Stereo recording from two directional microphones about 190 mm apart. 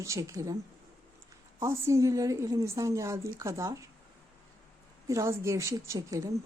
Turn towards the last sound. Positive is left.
turn(degrees=-15)  # may be behind; listen again after turning